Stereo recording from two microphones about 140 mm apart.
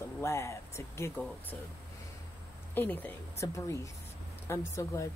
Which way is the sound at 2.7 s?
15° left (ahead or behind).